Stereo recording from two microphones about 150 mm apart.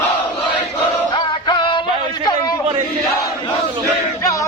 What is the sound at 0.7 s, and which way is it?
Music, 30° left (ahead or behind).